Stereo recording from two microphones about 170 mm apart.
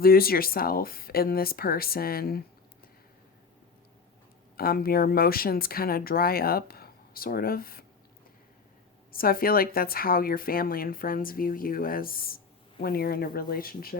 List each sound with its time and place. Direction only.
0.0 s speech: 60° left (ahead or behind)
4.5 s speech: 60° left (ahead or behind)
9.1 s speech: 60° left (ahead or behind)